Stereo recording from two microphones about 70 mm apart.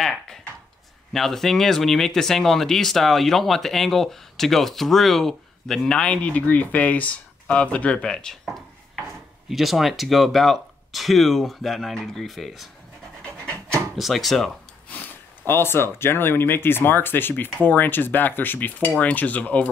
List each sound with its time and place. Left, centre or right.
0.0 s speech: centre
8.5 s speech: centre
13.2 s pant: centre
13.9 s speech: centre
14.9 s speech: left